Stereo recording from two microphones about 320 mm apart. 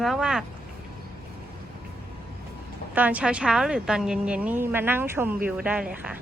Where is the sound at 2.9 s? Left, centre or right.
Centre.